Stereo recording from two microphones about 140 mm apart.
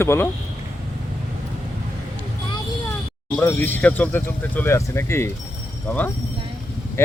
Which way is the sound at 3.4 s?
15° left (ahead or behind).